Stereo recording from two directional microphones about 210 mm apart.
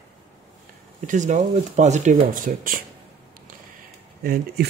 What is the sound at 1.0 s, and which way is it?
Speech, 35° right (ahead or behind).